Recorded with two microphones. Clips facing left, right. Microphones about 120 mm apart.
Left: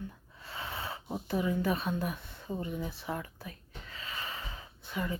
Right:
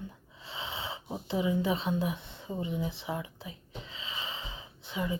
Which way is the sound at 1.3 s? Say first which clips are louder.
Right 1 dB; 15° right (ahead or behind).